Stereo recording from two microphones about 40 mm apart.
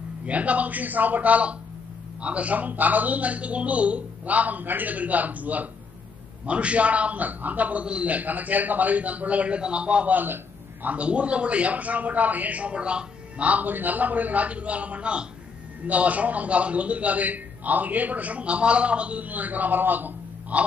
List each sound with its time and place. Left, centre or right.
0.2 s a man's voice: right
6.4 s a man's voice: right
7.8 s a man's voice: right
10.1 s a sound: right
10.9 s a man's voice: right